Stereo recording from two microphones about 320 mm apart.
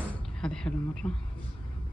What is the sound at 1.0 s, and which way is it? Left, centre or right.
Speech, centre.